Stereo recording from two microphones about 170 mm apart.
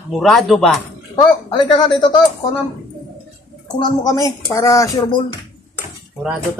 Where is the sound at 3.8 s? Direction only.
25° left (ahead or behind).